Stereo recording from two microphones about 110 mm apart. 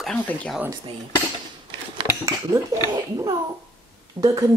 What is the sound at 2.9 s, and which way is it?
A child's voice, 35° right (ahead or behind).